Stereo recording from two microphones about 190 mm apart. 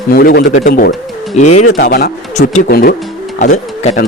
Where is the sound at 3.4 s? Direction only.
40° left (ahead or behind).